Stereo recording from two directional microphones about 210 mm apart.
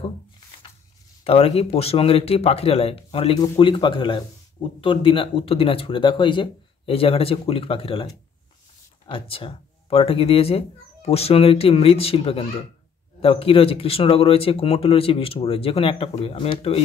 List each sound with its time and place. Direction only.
1.2 s speech: 30° left (ahead or behind)